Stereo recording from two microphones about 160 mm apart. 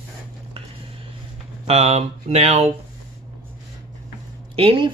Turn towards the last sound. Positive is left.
turn(degrees=-35)  # may be behind; listen again after turning